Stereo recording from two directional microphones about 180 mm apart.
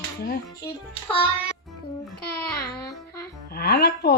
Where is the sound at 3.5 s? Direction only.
60° left (ahead or behind).